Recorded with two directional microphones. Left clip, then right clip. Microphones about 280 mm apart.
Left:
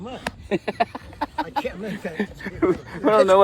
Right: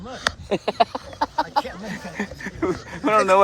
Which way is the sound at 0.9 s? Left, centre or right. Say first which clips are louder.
Right 4 dB; centre.